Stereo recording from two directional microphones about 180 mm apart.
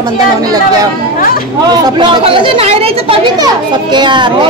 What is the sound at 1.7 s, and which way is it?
Speech, 25° right (ahead or behind).